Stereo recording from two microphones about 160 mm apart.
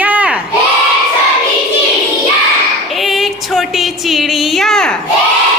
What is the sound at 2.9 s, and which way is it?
A woman's voice, centre (ahead or behind).